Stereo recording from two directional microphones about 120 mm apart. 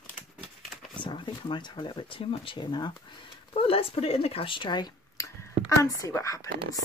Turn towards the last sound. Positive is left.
turn(degrees=30)  # may be behind; listen again after turning